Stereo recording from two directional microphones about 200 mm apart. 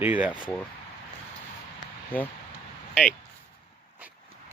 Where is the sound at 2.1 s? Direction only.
10° left (ahead or behind).